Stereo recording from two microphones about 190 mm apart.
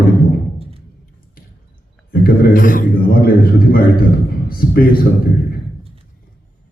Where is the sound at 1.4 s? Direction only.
50° left (ahead or behind).